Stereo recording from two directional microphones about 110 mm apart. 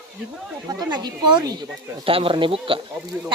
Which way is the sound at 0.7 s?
40° right (ahead or behind).